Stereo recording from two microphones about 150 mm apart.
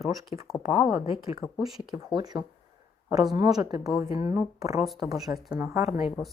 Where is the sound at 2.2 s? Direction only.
30° right (ahead or behind).